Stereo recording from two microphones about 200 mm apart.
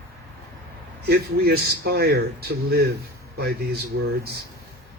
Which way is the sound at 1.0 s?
55° right (ahead or behind).